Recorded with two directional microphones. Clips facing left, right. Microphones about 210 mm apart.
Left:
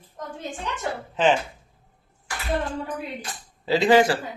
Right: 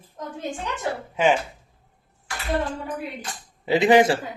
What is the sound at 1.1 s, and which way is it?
Speech, 10° right (ahead or behind).